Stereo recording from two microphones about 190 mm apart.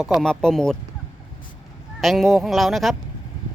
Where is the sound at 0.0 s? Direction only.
Centre (ahead or behind).